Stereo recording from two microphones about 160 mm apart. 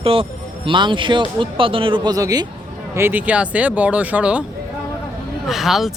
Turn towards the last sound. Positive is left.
turn(degrees=0)  # may be behind; listen again after turning